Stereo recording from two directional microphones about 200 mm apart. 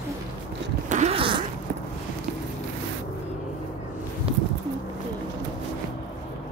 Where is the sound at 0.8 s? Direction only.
35° right (ahead or behind).